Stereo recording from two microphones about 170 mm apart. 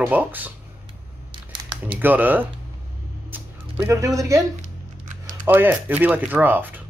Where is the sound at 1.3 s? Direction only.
30° right (ahead or behind).